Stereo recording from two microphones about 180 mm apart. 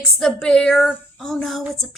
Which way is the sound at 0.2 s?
5° left (ahead or behind).